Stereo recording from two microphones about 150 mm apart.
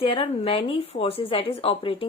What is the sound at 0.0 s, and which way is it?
A woman's voice, 35° left (ahead or behind).